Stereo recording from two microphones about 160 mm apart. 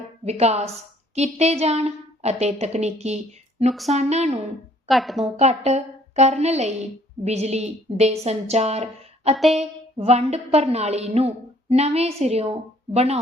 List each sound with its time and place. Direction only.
0.3 s a woman's voice: 40° right (ahead or behind)
4.9 s a woman's voice: centre (ahead or behind)
5.2 s a woman's voice: 45° right (ahead or behind)